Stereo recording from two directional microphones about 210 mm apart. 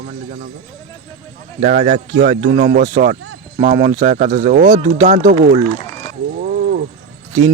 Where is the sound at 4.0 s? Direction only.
35° right (ahead or behind).